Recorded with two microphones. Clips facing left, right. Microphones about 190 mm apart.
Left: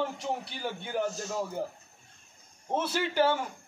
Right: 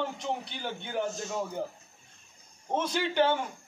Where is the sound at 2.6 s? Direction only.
5° left (ahead or behind).